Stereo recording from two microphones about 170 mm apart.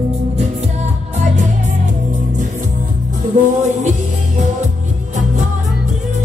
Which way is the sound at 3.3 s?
50° right (ahead or behind).